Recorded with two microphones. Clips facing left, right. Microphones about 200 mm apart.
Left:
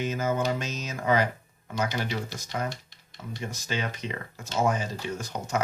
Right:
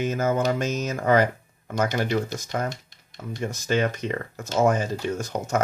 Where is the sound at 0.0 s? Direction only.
50° right (ahead or behind).